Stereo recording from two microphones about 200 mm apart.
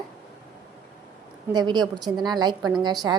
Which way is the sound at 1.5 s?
20° right (ahead or behind).